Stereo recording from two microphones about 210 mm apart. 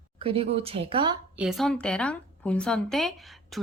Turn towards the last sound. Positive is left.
turn(degrees=0)  # may be behind; listen again after turning